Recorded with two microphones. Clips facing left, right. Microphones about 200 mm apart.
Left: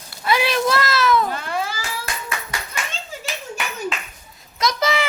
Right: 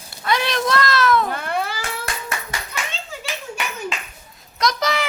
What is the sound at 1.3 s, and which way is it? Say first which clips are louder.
Cat: right 1 dB; 60° right (ahead or behind).